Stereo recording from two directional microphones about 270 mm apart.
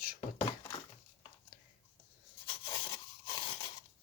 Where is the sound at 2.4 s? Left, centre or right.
Centre.